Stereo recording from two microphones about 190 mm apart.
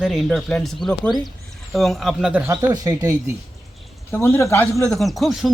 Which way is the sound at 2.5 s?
20° right (ahead or behind).